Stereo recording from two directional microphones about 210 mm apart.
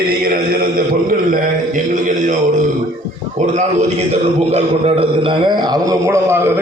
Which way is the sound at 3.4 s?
35° right (ahead or behind).